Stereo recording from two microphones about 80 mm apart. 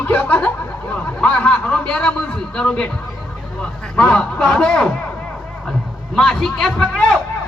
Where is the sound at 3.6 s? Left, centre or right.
Centre.